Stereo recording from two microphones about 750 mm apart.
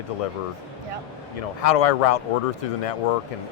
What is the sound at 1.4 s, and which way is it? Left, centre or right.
Speech, left.